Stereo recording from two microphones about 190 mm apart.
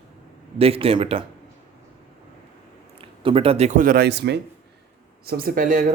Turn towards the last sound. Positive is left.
turn(degrees=-45)  # may be behind; listen again after turning